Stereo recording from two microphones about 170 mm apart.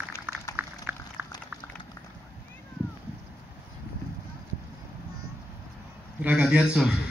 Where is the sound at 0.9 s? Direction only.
10° right (ahead or behind).